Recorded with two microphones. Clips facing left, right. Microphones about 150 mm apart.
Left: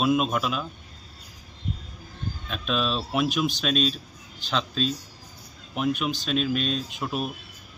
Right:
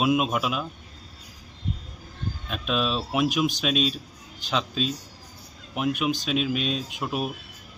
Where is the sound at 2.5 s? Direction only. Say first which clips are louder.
Right 1 dB; 5° right (ahead or behind).